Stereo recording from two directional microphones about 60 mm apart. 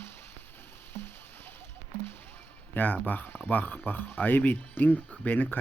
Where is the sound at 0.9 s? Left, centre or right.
Left.